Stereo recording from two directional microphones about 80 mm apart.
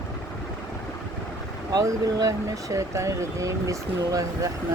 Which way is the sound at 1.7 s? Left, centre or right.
Right.